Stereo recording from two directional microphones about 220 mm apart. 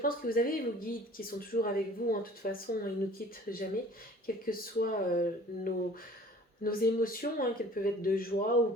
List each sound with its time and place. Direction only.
0.0 s speech: 40° left (ahead or behind)